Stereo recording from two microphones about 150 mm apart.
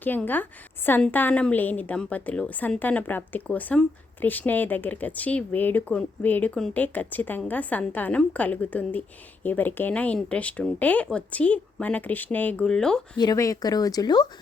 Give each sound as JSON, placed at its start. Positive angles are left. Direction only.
{"t": 0.0, "sound": "a woman's voice", "side_deg": 10}
{"t": 13.1, "sound": "speech", "side_deg": 25}